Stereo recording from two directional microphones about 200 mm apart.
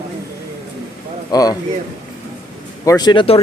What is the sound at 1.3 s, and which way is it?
Speech, 20° left (ahead or behind).